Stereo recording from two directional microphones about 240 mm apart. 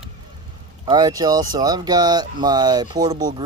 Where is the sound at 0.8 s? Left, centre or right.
Centre.